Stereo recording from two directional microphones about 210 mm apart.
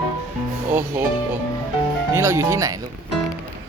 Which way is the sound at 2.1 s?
10° right (ahead or behind).